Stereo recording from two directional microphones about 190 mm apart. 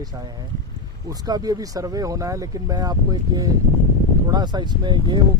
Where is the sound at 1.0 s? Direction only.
20° right (ahead or behind).